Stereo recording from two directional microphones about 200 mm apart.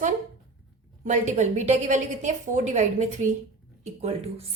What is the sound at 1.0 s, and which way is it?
A woman's voice, 35° right (ahead or behind).